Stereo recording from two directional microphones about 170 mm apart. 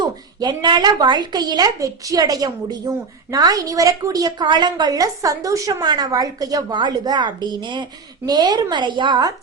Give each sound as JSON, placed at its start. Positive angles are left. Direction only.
{"t": 0.0, "sound": "a woman's voice", "side_deg": -25}